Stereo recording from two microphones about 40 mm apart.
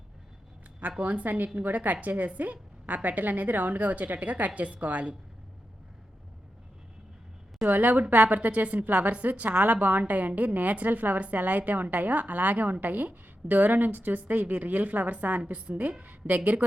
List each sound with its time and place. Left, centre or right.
0.8 s a woman's voice: right
1.2 s a woman's voice: right
7.6 s a woman's voice: right